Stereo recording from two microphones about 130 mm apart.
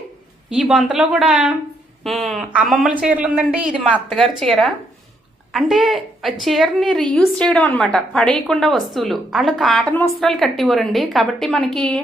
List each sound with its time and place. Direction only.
0.5 s a woman's voice: centre (ahead or behind)
4.1 s a woman's voice: centre (ahead or behind)